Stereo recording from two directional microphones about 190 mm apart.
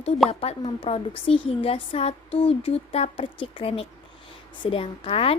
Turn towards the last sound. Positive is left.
turn(degrees=30)  # may be behind; listen again after turning